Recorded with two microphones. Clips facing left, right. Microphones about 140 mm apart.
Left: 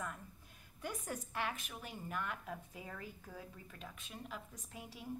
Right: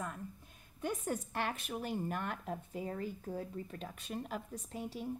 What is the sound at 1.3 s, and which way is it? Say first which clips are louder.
A woman's voice: right 4 dB; 40° right (ahead or behind).